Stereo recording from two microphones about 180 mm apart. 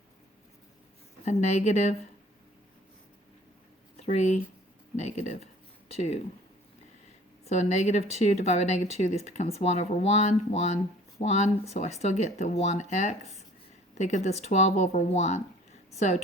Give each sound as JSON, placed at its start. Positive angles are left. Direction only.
{"t": 1.2, "sound": "speech", "side_deg": 40}
{"t": 4.0, "sound": "speech", "side_deg": 40}
{"t": 7.4, "sound": "speech", "side_deg": 40}